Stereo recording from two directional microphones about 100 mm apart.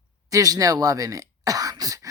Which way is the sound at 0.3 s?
35° right (ahead or behind).